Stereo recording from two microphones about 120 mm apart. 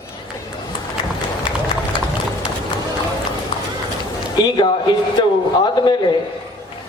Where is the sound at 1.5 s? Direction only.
40° left (ahead or behind).